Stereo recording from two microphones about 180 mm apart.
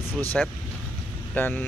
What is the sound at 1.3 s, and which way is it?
Speech, 10° left (ahead or behind).